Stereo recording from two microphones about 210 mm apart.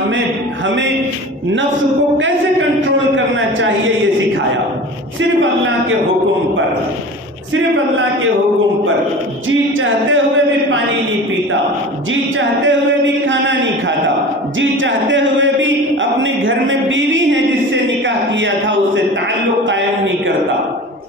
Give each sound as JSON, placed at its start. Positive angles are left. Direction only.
{"t": 3.3, "sound": "a man's voice", "side_deg": -65}
{"t": 9.8, "sound": "a man's voice", "side_deg": -65}
{"t": 12.1, "sound": "a man's voice", "side_deg": -65}
{"t": 17.8, "sound": "a sound", "side_deg": -60}